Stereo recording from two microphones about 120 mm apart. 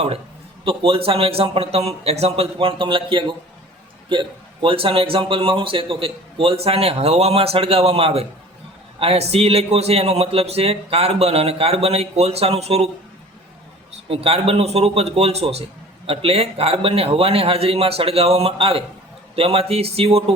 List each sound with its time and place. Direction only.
0.6 s a man's voice: 50° right (ahead or behind)
14.1 s a man's voice: 55° right (ahead or behind)